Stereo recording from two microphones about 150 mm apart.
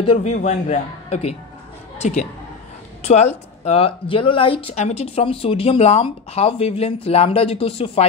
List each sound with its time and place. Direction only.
0.0 s speech: 35° left (ahead or behind)
0.3 s a man's voice: 50° left (ahead or behind)